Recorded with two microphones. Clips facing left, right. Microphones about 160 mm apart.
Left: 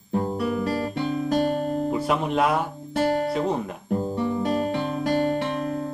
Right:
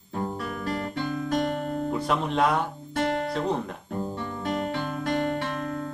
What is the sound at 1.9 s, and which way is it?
Guitar, 5° left (ahead or behind).